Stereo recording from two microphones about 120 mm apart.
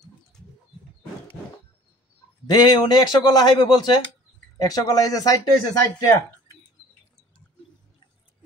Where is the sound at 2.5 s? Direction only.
35° left (ahead or behind).